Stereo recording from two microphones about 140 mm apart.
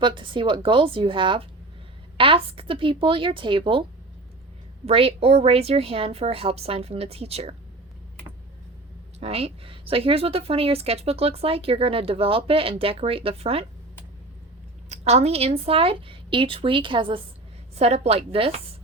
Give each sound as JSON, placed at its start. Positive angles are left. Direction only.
{"t": 0.0, "sound": "a woman's voice", "side_deg": -35}
{"t": 4.9, "sound": "speech", "side_deg": -45}
{"t": 9.2, "sound": "speech", "side_deg": -45}
{"t": 14.8, "sound": "a woman's voice", "side_deg": -50}
{"t": 17.7, "sound": "speech", "side_deg": -50}